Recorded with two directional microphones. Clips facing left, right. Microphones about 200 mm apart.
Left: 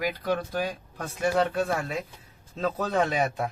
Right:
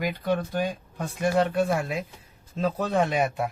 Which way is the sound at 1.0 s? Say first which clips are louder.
Right 1 dB; 5° right (ahead or behind).